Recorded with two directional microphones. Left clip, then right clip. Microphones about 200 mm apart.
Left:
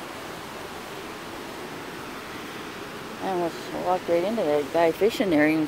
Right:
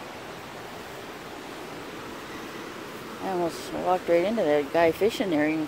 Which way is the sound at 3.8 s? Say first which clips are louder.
Right 1 dB; 20° right (ahead or behind).